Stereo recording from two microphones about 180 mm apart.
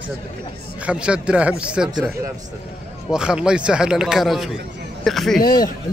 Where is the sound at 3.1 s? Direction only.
5° right (ahead or behind).